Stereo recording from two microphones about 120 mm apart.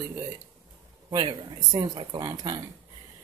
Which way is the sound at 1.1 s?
45° right (ahead or behind).